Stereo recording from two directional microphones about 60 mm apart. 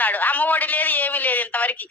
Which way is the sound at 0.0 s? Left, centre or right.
Left.